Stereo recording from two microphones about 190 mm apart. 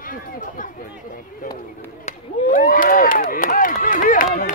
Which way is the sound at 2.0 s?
45° left (ahead or behind).